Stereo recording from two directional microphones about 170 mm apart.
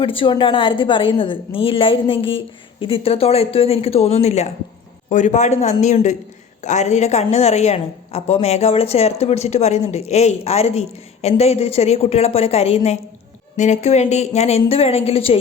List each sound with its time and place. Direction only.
0.0 s a woman's voice: 30° left (ahead or behind)